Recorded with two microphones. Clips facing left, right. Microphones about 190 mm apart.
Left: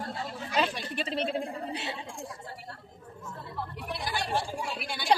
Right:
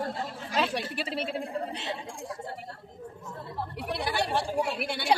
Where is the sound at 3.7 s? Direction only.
65° right (ahead or behind).